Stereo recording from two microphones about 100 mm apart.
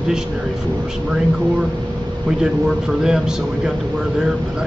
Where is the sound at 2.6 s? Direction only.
5° right (ahead or behind).